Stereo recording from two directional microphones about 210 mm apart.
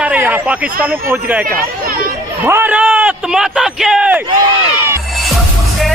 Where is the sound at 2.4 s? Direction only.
10° right (ahead or behind).